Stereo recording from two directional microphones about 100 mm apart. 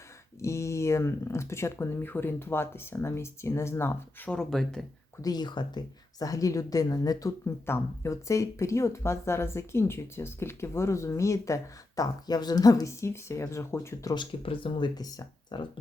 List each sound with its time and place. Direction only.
0.4 s speech: 30° left (ahead or behind)
4.3 s speech: 5° left (ahead or behind)
5.2 s speech: 45° left (ahead or behind)
14.2 s speech: 60° left (ahead or behind)
14.9 s speech: 40° left (ahead or behind)